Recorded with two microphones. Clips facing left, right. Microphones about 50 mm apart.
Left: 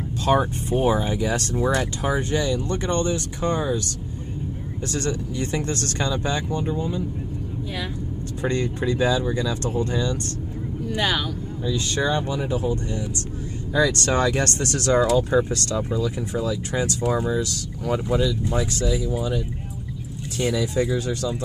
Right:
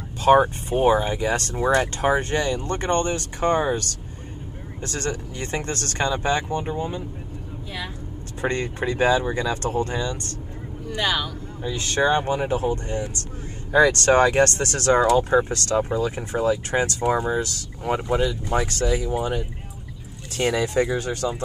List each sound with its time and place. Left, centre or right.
0.3 s speech: right
2.0 s speech: right
4.8 s speech: right
8.4 s speech: right
10.9 s speech: centre
11.6 s speech: right